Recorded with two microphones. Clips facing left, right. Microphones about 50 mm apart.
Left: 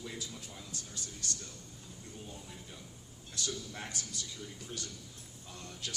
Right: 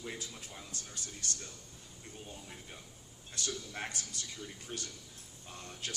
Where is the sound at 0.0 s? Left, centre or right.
Right.